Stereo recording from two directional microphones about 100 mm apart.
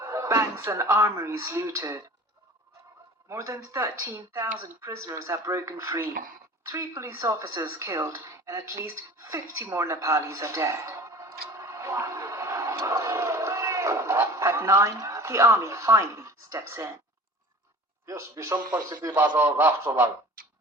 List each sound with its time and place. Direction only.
0.0 s speech: 30° right (ahead or behind)
3.2 s speech: 30° right (ahead or behind)
18.0 s speech: 30° right (ahead or behind)